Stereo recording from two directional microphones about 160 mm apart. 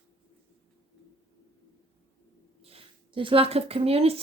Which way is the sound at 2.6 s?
35° right (ahead or behind).